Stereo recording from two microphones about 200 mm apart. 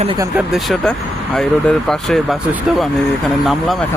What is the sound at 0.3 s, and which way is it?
Speech, centre (ahead or behind).